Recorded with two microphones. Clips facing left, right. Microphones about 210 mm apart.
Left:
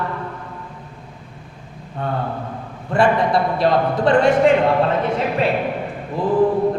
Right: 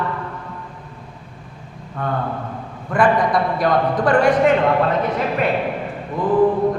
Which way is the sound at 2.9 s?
25° left (ahead or behind).